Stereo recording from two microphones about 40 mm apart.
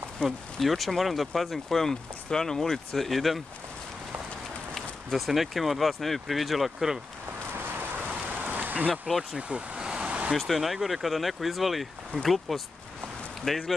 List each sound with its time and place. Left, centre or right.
0.2 s speech: left
0.6 s speech: centre
5.1 s speech: centre
8.4 s rain on surface: right
9.5 s vehicle: right
10.3 s speech: centre